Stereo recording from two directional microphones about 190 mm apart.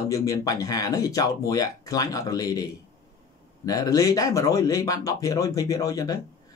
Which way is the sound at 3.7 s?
20° left (ahead or behind).